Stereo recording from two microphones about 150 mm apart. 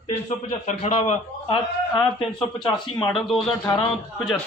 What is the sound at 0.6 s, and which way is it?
A man's voice, 50° left (ahead or behind).